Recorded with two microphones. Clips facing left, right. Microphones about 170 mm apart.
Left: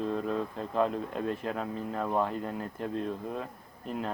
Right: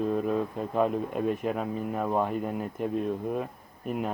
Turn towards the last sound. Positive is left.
turn(degrees=-15)  # may be behind; listen again after turning